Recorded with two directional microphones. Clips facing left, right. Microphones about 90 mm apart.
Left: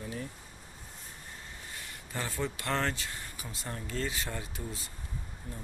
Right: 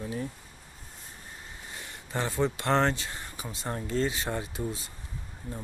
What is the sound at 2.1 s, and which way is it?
Speech, 25° right (ahead or behind).